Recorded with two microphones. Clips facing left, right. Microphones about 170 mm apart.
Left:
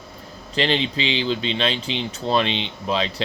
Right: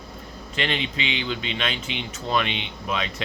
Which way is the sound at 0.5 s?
30° left (ahead or behind).